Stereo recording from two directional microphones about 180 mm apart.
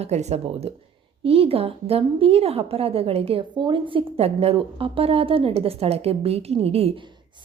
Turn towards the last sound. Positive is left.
turn(degrees=-35)  # may be behind; listen again after turning